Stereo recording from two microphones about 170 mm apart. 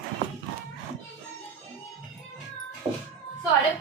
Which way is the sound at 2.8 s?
30° right (ahead or behind).